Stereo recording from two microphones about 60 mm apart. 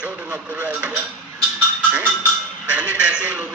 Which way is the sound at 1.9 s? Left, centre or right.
Right.